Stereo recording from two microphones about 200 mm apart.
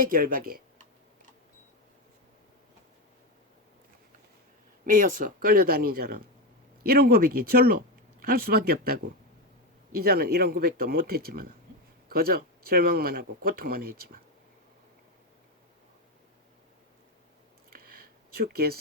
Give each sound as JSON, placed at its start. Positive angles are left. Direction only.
{"t": 0.0, "sound": "speech", "side_deg": -45}
{"t": 4.9, "sound": "speech", "side_deg": -45}
{"t": 17.7, "sound": "a sound", "side_deg": -50}